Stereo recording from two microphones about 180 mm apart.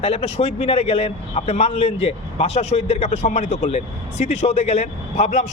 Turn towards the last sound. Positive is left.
turn(degrees=35)  # may be behind; listen again after turning